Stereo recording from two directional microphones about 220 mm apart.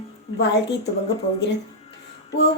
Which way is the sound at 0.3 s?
50° left (ahead or behind).